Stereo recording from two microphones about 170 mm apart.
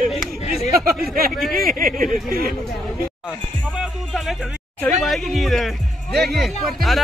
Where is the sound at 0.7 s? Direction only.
60° right (ahead or behind).